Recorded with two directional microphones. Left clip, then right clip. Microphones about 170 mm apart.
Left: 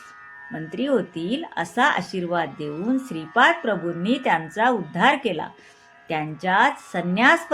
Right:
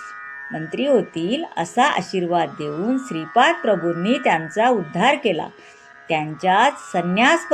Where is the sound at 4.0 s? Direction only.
45° right (ahead or behind).